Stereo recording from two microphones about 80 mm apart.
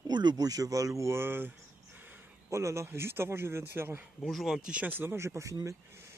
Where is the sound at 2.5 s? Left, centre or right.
Right.